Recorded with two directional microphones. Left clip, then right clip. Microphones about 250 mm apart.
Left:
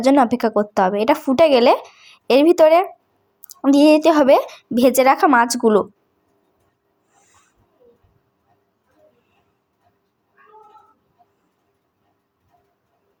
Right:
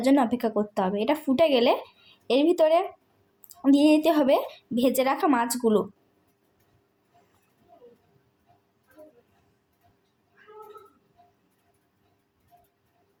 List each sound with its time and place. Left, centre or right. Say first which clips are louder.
0.0 s speech: left 8 dB; centre